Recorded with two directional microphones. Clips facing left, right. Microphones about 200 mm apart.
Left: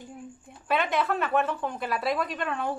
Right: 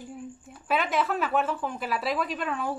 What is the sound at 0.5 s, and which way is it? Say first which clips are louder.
Speech: left 1 dB; 5° right (ahead or behind).